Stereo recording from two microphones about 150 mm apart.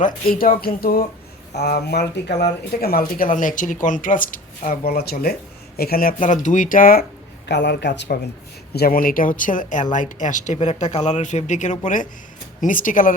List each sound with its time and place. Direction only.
0.0 s speech: 70° left (ahead or behind)
1.5 s speech: 90° left; by 4.8 s 65° left (ahead or behind)
4.9 s speech: 90° left; by 7.0 s 70° left (ahead or behind)
7.7 s speech: 90° left; by 13.1 s 65° left (ahead or behind)